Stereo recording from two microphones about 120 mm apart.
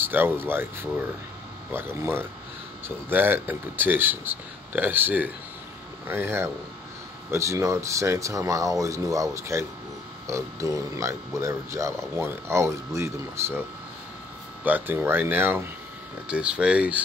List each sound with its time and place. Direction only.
0.0 s speech: 15° right (ahead or behind)
14.6 s speech: 15° right (ahead or behind)